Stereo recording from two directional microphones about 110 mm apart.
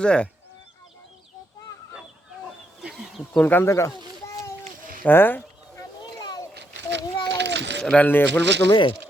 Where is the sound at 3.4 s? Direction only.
15° left (ahead or behind).